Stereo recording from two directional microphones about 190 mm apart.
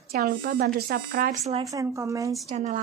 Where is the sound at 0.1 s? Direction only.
50° right (ahead or behind).